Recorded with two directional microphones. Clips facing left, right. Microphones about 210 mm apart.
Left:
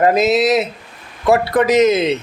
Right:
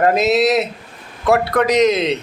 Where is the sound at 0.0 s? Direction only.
Centre (ahead or behind).